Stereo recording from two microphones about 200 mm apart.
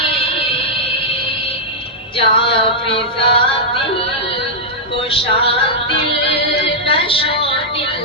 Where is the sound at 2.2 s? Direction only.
25° left (ahead or behind).